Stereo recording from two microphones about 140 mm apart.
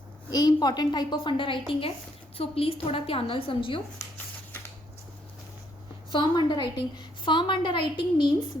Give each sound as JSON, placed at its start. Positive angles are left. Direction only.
{"t": 0.3, "sound": "a woman's voice", "side_deg": 30}
{"t": 6.1, "sound": "a woman's voice", "side_deg": 35}